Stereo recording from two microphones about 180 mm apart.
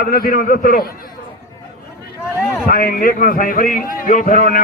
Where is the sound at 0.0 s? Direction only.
55° left (ahead or behind).